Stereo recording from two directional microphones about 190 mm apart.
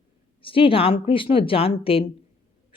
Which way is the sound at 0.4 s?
30° left (ahead or behind).